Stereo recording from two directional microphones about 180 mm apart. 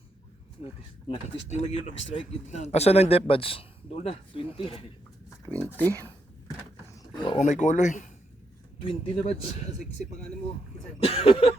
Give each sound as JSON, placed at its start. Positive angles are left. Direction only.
{"t": 1.1, "sound": "speech", "side_deg": 40}
{"t": 5.5, "sound": "speech", "side_deg": 10}
{"t": 6.9, "sound": "a sound", "side_deg": 25}
{"t": 7.3, "sound": "speech", "side_deg": 45}
{"t": 8.8, "sound": "speech", "side_deg": 30}
{"t": 11.0, "sound": "speech", "side_deg": 35}